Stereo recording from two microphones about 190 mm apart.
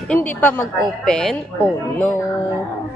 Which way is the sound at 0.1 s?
10° left (ahead or behind).